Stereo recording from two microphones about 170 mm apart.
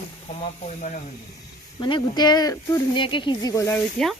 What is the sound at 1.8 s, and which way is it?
Speech, 25° left (ahead or behind).